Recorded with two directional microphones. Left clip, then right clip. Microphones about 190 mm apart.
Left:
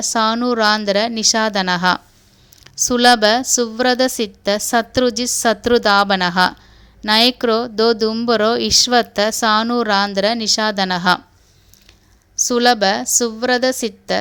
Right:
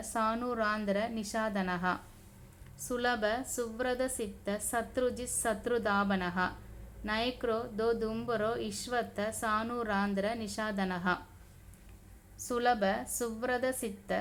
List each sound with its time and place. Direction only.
0.1 s a woman's voice: 45° left (ahead or behind)
12.5 s a woman's voice: 40° left (ahead or behind)